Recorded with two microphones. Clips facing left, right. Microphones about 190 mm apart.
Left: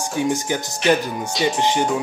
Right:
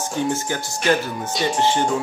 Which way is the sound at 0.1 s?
15° left (ahead or behind).